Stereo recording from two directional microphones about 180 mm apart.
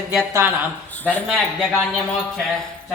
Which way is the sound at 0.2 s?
15° right (ahead or behind).